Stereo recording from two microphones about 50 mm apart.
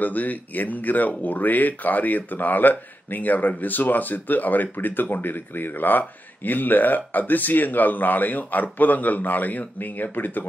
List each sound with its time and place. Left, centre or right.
0.0 s speech: left